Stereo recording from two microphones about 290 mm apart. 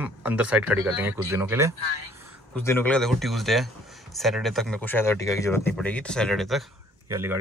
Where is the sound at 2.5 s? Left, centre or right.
Centre.